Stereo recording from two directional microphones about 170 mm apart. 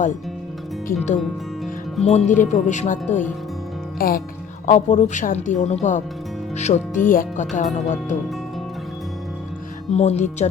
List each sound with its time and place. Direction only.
0.9 s speech: 45° left (ahead or behind)
3.9 s speech: 60° left (ahead or behind)
4.6 s speech: 45° left (ahead or behind)
9.9 s speech: 40° left (ahead or behind)